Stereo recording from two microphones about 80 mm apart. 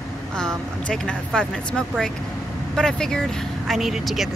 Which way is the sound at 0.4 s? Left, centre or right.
Centre.